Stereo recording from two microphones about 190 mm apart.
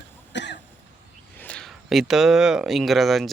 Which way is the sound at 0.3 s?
65° left (ahead or behind).